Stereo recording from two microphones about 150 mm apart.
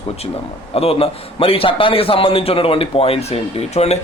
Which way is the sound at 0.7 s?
40° left (ahead or behind).